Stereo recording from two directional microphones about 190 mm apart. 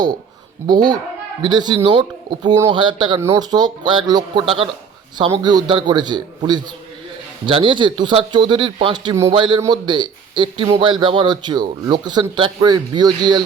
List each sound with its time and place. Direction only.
0.7 s speech: 20° right (ahead or behind)